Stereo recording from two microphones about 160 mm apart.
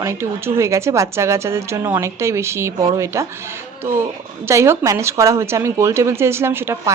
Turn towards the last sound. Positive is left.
turn(degrees=-15)  # may be behind; listen again after turning